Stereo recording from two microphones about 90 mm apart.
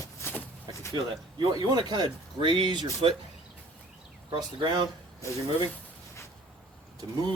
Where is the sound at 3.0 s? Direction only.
90° right.